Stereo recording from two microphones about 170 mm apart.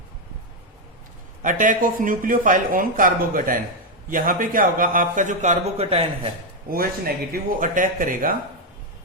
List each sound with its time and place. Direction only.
1.4 s speech: 50° right (ahead or behind)
6.7 s speech: 60° right (ahead or behind)